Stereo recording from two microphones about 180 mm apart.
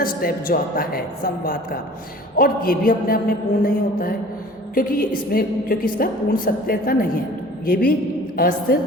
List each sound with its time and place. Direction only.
0.0 s a woman's voice: 55° left (ahead or behind)